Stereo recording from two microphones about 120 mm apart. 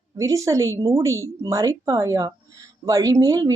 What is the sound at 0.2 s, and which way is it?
A woman's voice, 25° right (ahead or behind).